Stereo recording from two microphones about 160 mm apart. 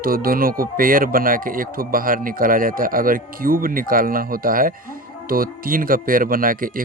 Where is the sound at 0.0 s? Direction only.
65° right (ahead or behind).